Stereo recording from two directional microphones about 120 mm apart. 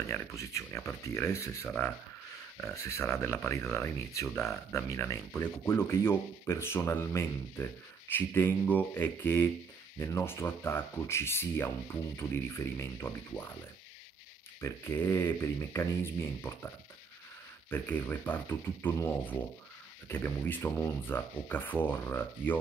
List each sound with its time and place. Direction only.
0.1 s speech: 20° left (ahead or behind)
14.6 s speech: 20° left (ahead or behind)